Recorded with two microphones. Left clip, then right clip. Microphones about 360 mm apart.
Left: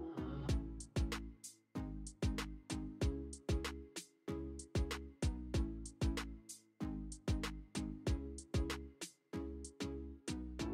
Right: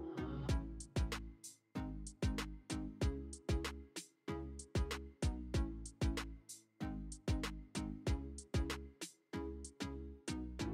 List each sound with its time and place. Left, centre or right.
0.0 s music: centre